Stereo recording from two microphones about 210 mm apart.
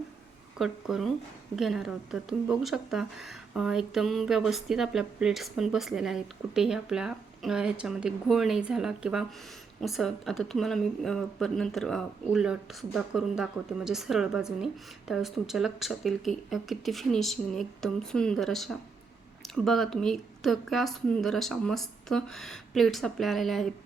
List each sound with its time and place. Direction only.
0.6 s a woman's voice: centre (ahead or behind)